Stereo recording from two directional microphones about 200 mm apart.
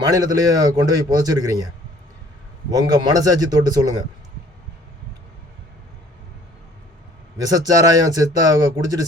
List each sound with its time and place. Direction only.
0.1 s a man's voice: 20° right (ahead or behind)
2.6 s speech: 20° right (ahead or behind)
7.3 s speech: 20° right (ahead or behind)